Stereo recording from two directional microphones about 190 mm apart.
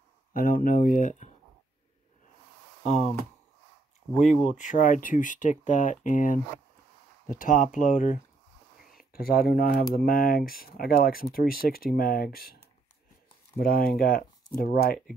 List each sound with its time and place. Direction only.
0.3 s speech: 45° left (ahead or behind)
4.2 s speech: 40° left (ahead or behind)